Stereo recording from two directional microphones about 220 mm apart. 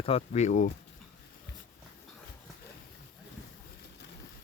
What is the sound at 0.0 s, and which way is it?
Speech, 30° left (ahead or behind).